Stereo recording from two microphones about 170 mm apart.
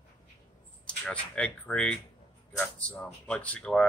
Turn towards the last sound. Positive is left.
turn(degrees=5)  # may be behind; listen again after turning